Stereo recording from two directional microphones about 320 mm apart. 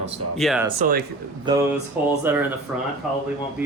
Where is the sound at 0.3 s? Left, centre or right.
Centre.